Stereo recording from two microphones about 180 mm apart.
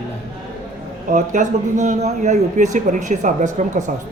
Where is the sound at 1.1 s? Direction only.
45° right (ahead or behind).